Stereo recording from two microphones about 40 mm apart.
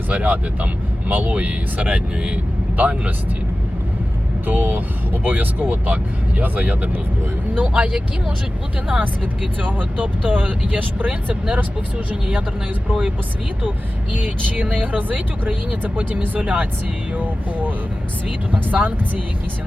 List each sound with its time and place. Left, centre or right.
0.1 s speech: right
4.4 s speech: right
7.7 s speech: right
8.9 s speech: right
12.9 s speech: right
13.6 s speech: right